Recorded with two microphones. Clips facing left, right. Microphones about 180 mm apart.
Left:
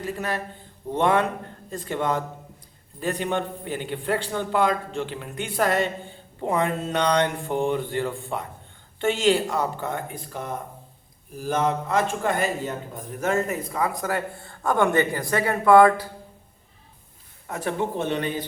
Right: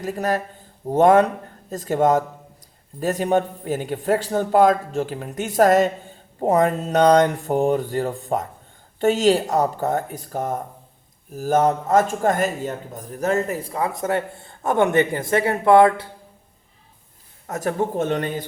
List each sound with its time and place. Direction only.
0.0 s a man's voice: 45° right (ahead or behind)
6.4 s a sound: 40° right (ahead or behind)
11.3 s a man's voice: 45° right (ahead or behind); by 16.0 s 25° right (ahead or behind)
17.4 s a man's voice: 45° right (ahead or behind)